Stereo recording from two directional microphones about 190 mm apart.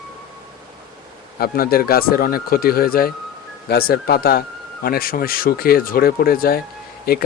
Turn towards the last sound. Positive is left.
turn(degrees=50)  # may be behind; listen again after turning